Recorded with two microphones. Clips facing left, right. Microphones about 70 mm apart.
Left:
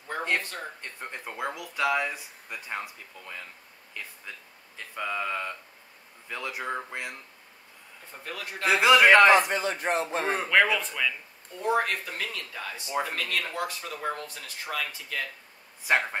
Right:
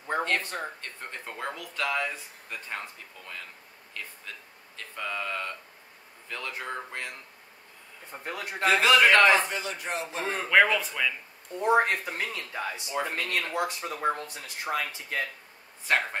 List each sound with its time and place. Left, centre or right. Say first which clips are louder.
0.4 s speech: right 3 dB; right
0.7 s speech: left 1 dB; centre
8.1 s speech: right 2 dB; right
8.6 s a man's voice: left 2 dB; centre
9.5 s speech: left 5 dB; left
10.2 s speech: left 3 dB; centre
10.5 s speech: right 2 dB; centre
11.5 s speech: right 3 dB; right
15.9 s speech: left 1 dB; centre